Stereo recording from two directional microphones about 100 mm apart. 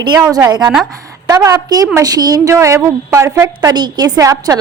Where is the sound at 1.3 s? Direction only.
35° right (ahead or behind).